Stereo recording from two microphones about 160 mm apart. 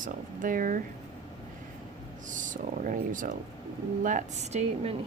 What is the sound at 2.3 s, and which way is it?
Speech, 55° right (ahead or behind).